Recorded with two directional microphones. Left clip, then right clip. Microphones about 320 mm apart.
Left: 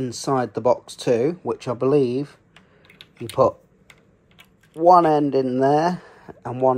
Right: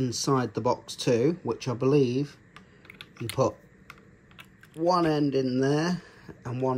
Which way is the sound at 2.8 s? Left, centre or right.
Centre.